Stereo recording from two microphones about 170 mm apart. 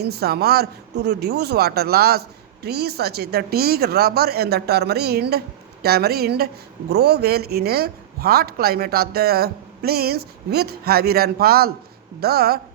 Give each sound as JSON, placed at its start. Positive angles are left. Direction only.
{"t": 0.0, "sound": "speech", "side_deg": -70}